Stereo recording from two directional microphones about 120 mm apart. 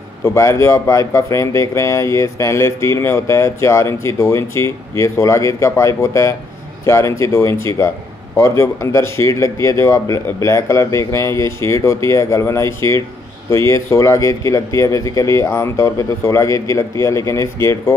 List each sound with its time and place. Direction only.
0.2 s speech: 25° left (ahead or behind)